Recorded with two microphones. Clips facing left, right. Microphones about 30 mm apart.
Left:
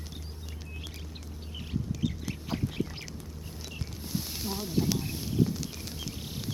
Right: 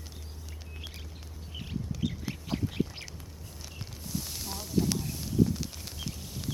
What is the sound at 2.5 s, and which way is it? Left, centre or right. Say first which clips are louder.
Duck: right 1 dB; centre.